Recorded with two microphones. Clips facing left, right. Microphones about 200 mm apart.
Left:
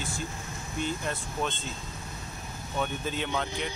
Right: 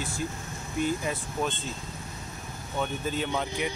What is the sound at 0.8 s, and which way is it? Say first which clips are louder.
Speech: right 4 dB; 5° right (ahead or behind).